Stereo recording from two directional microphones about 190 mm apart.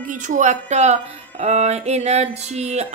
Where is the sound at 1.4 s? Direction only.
35° right (ahead or behind).